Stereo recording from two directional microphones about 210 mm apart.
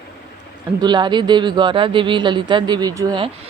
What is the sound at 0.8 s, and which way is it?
Speech, 20° right (ahead or behind).